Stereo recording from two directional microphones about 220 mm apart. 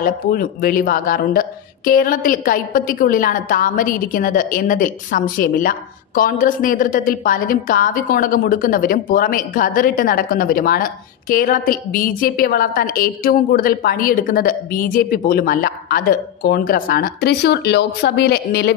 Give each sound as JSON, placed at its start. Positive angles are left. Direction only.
{"t": 0.0, "sound": "speech", "side_deg": 40}